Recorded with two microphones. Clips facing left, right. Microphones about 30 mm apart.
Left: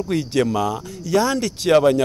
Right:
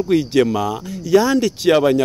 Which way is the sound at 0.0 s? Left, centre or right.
Centre.